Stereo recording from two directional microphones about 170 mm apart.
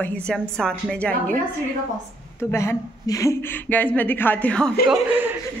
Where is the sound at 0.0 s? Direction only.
5° left (ahead or behind).